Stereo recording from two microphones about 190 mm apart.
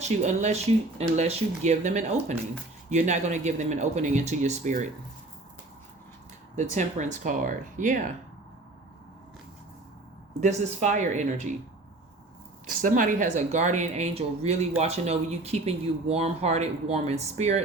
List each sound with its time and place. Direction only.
0.0 s speech: 40° right (ahead or behind)
6.6 s speech: 40° right (ahead or behind)
10.4 s speech: 40° right (ahead or behind)
12.6 s speech: 45° right (ahead or behind)